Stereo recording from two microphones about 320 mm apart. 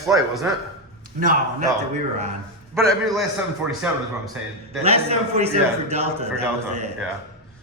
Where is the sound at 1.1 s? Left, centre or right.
Right.